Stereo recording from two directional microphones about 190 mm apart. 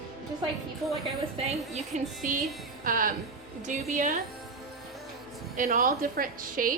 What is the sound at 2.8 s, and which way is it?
A woman's voice, 45° right (ahead or behind).